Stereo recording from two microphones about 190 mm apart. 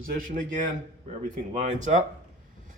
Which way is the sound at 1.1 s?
35° right (ahead or behind).